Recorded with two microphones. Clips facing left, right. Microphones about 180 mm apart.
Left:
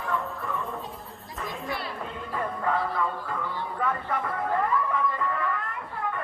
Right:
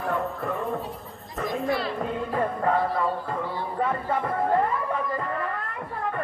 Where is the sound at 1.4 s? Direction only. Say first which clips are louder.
Right 7 dB; 40° right (ahead or behind).